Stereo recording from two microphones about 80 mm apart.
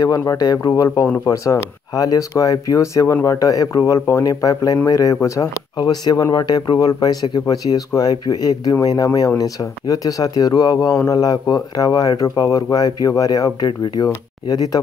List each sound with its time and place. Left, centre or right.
0.0 s speech: left
1.2 s speech: left
5.8 s speech: left
12.7 s speech: left